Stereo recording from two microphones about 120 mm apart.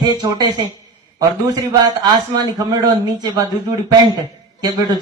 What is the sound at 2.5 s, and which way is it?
Speech, 35° right (ahead or behind).